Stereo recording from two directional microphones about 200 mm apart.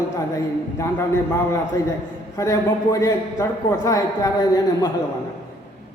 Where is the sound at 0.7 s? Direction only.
15° left (ahead or behind).